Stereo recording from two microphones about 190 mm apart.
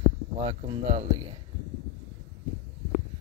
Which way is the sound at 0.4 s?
35° right (ahead or behind).